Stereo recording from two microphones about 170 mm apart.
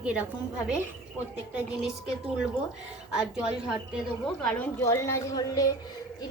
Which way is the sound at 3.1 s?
5° right (ahead or behind).